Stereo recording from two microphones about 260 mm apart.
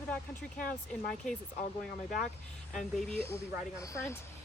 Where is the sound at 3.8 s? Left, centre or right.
Centre.